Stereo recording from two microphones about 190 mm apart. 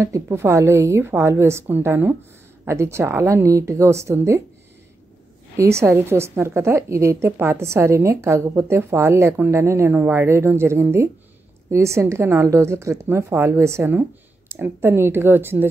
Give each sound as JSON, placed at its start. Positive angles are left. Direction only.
{"t": 0.0, "sound": "a woman's voice", "side_deg": -15}
{"t": 5.6, "sound": "a woman's voice", "side_deg": -15}